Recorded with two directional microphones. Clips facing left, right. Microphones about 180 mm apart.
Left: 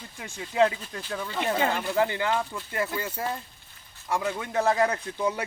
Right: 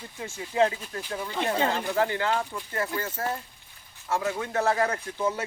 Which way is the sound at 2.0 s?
15° left (ahead or behind).